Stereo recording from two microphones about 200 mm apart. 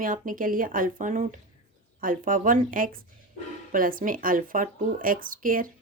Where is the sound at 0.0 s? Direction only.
45° right (ahead or behind).